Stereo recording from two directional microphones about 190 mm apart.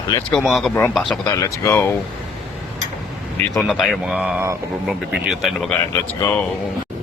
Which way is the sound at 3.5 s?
Centre (ahead or behind).